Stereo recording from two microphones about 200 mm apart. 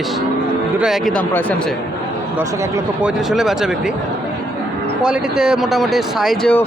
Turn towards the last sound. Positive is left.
turn(degrees=5)  # may be behind; listen again after turning